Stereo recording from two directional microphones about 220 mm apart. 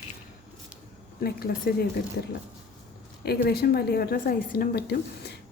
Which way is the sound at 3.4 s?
45° left (ahead or behind).